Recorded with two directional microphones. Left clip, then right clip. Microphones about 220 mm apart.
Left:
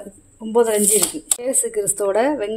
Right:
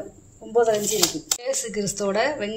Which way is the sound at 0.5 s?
40° left (ahead or behind).